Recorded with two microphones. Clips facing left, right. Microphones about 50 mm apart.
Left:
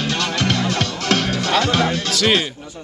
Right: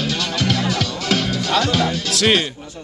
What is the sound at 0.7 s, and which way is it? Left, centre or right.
Music, left.